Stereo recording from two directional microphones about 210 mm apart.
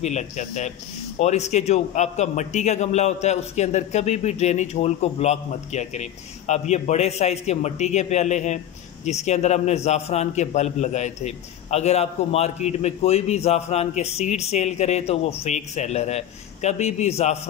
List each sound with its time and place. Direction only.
0.0 s a man's voice: 35° left (ahead or behind)